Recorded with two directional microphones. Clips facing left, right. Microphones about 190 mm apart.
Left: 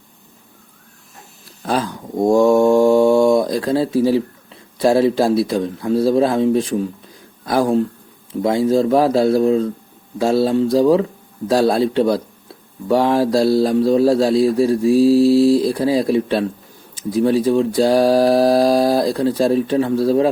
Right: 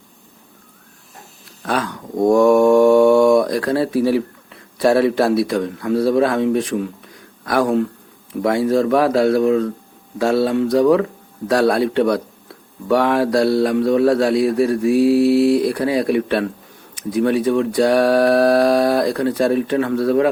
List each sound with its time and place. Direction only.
1.6 s speech: 30° left (ahead or behind)
2.3 s mantra: 25° left (ahead or behind)
4.8 s speech: 25° left (ahead or behind)